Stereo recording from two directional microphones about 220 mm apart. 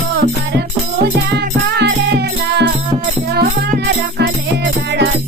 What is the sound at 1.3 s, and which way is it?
Music, 50° right (ahead or behind).